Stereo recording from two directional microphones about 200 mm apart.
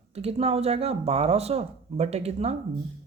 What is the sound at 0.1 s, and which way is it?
Speech, 30° right (ahead or behind).